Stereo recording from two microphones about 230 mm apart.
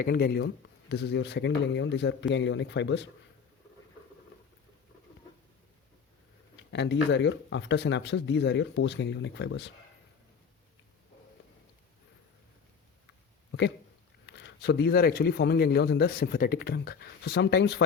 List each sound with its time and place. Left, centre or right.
0.0 s speech: left
6.7 s speech: left
13.5 s a sound: left
14.3 s speech: left